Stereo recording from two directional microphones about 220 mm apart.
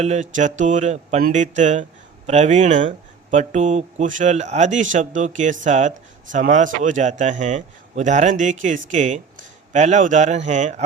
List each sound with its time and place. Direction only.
0.0 s a man's voice: 35° right (ahead or behind)